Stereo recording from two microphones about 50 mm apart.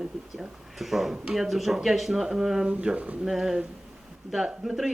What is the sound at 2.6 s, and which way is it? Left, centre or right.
Speech, right.